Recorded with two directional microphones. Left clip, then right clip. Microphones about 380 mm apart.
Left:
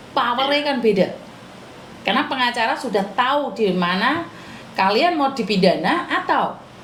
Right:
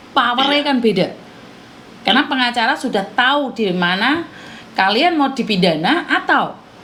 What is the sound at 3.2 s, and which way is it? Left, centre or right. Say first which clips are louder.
Speech: right 4 dB; right.